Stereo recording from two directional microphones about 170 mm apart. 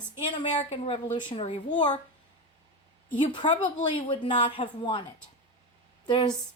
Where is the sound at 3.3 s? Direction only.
25° left (ahead or behind).